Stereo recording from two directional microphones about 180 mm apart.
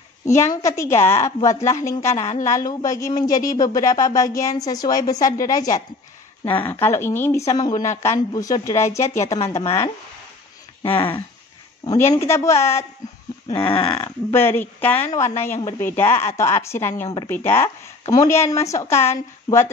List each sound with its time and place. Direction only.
0.6 s speech: 15° left (ahead or behind)
9.6 s speech: 30° left (ahead or behind)
11.0 s speech: 30° left (ahead or behind)
13.5 s speech: 30° left (ahead or behind)
14.0 s speech: 10° left (ahead or behind)